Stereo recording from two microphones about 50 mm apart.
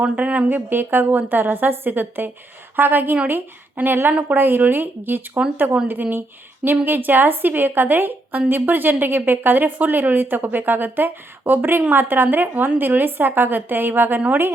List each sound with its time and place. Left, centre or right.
0.0 s speech: right
0.7 s a woman's voice: right